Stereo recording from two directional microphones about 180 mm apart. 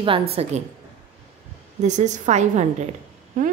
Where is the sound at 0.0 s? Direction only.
30° right (ahead or behind).